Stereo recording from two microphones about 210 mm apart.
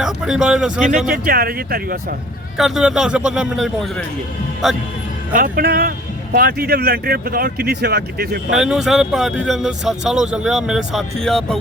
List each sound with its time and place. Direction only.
0.0 s speech: 5° right (ahead or behind)
1.2 s speech: 45° right (ahead or behind)
2.6 s speech: centre (ahead or behind)
5.3 s speech: 45° right (ahead or behind)
8.5 s speech: centre (ahead or behind)